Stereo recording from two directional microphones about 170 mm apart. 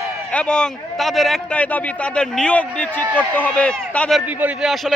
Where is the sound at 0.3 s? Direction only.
5° left (ahead or behind).